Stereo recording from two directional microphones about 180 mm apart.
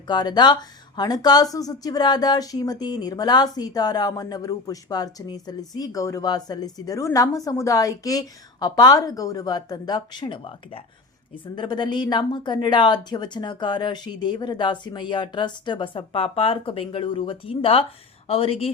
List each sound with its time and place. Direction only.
0.1 s speech: 25° left (ahead or behind)